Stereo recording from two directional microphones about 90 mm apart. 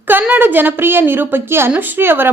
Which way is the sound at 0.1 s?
20° right (ahead or behind).